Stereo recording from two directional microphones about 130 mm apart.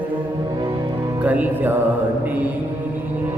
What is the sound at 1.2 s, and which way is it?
Music, 10° right (ahead or behind).